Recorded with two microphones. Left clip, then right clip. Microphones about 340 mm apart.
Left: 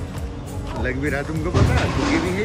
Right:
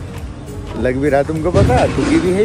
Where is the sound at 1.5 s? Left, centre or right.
Left.